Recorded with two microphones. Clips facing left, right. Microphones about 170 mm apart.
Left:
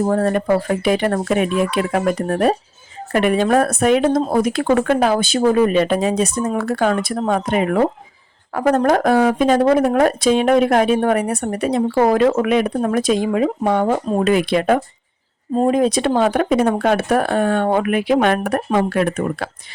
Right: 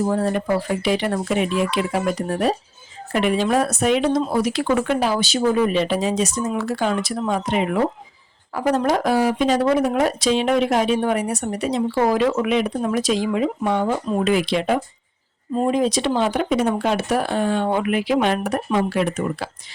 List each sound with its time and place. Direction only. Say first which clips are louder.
0.0 s speech: left 3 dB; 55° left (ahead or behind)